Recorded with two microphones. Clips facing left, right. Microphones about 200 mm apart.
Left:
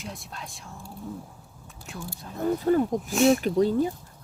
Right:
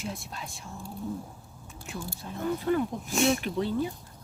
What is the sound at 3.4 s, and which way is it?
Speech, 45° left (ahead or behind).